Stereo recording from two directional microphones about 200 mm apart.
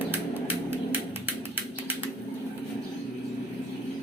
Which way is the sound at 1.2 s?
10° right (ahead or behind).